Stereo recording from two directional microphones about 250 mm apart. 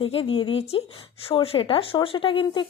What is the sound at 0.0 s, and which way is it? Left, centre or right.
A woman's voice, left.